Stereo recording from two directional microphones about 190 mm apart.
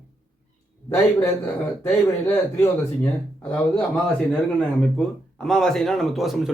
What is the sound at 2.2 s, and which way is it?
Speech, 10° left (ahead or behind).